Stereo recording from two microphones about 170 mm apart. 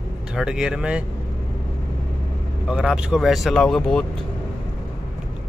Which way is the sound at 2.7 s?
5° right (ahead or behind).